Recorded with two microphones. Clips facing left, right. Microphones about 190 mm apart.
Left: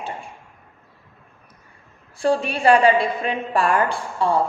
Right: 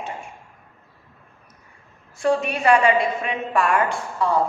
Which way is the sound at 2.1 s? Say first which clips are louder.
Even; 30° left (ahead or behind).